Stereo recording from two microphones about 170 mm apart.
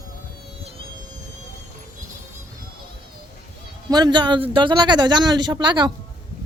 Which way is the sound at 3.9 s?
25° right (ahead or behind).